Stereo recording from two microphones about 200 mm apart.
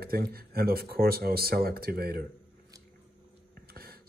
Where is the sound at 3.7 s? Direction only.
50° right (ahead or behind).